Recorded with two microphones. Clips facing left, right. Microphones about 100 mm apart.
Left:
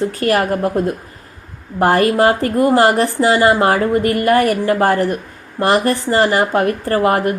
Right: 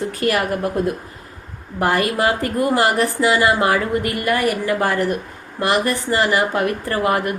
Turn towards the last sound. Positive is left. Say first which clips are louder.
# left 4 dB
turn(degrees=35)  # may be behind; listen again after turning